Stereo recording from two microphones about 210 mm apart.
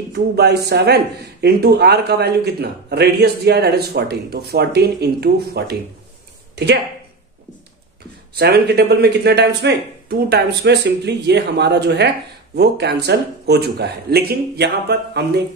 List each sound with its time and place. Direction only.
0.1 s speech: 50° right (ahead or behind)
8.4 s speech: 50° right (ahead or behind)